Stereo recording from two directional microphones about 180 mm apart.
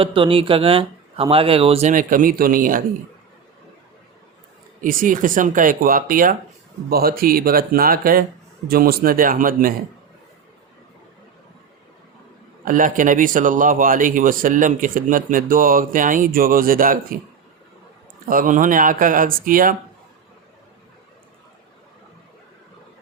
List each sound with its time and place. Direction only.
0.0 s speech: 30° right (ahead or behind)
1.9 s a man's voice: 50° right (ahead or behind)
4.8 s a man's voice: 50° right (ahead or behind)
12.6 s a man's voice: 45° right (ahead or behind)
18.3 s a man's voice: 50° right (ahead or behind)